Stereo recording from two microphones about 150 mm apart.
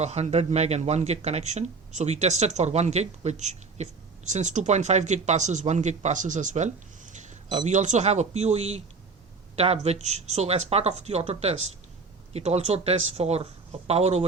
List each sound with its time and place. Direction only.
0.0 s speech: 45° right (ahead or behind)